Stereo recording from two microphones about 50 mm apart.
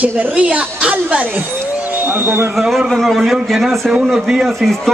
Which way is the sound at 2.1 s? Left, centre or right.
Right.